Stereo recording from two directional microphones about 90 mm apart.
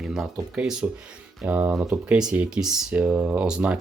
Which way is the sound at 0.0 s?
5° right (ahead or behind).